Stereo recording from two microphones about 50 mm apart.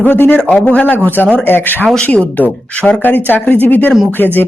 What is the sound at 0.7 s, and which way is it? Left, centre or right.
Speech, left.